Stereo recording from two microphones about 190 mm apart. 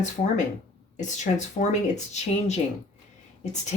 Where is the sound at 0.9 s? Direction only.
40° left (ahead or behind).